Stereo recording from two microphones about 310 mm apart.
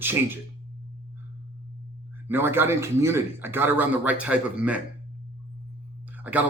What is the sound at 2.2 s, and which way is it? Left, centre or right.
Speech, centre.